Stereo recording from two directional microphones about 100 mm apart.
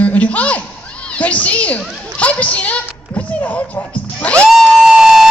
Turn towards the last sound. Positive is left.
turn(degrees=-5)  # may be behind; listen again after turning